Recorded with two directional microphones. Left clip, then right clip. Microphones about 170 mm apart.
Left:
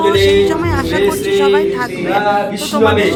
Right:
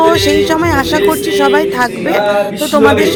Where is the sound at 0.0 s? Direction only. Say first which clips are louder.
Right 1 dB; 40° right (ahead or behind).